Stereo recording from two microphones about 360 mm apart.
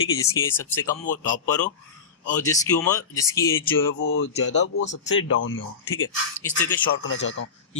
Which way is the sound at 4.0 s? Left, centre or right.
Left.